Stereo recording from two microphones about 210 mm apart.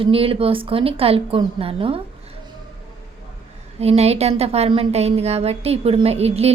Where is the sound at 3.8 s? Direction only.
30° right (ahead or behind).